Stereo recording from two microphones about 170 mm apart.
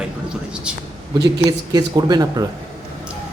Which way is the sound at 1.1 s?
25° right (ahead or behind).